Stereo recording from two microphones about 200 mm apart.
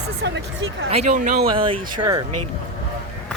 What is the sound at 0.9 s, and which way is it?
Speech, 35° right (ahead or behind).